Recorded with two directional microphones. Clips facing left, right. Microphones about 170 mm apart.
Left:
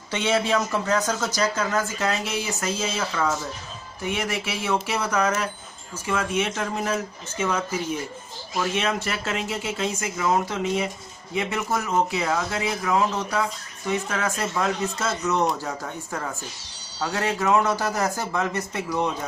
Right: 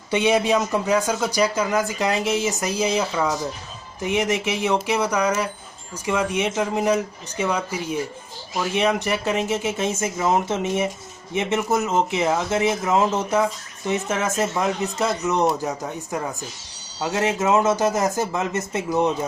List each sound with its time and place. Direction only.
0.1 s speech: 15° right (ahead or behind)